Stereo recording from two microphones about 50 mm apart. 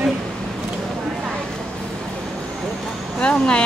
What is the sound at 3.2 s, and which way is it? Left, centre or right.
Speech, left.